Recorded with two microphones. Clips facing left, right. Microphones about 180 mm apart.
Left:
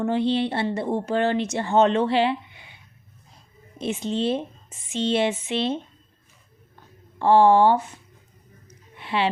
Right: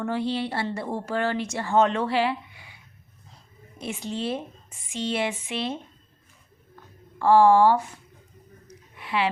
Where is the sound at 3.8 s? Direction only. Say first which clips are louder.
Left 5 dB; 20° left (ahead or behind).